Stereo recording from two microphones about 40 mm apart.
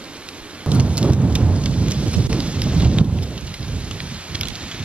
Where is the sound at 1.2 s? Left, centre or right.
Right.